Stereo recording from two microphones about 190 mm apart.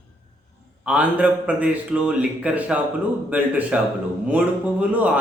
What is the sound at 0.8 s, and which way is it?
A man's voice, 5° right (ahead or behind).